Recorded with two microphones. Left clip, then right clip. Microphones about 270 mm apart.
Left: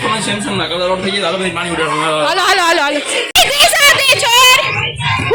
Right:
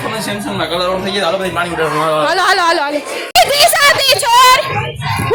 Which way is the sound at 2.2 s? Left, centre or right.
Centre.